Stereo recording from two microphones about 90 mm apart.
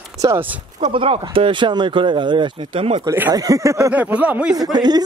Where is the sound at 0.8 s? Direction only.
75° right (ahead or behind).